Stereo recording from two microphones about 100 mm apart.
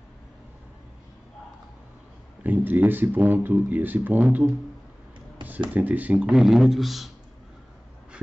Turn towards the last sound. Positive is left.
turn(degrees=0)  # may be behind; listen again after turning